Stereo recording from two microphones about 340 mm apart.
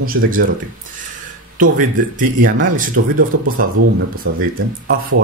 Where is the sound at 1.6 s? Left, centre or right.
Right.